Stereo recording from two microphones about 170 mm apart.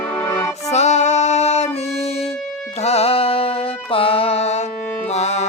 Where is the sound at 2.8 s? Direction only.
35° left (ahead or behind).